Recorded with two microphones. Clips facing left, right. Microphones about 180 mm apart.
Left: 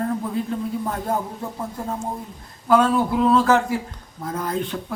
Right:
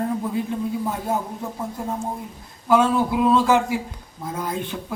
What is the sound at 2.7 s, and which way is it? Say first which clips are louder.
Speech: left 1 dB; 10° right (ahead or behind).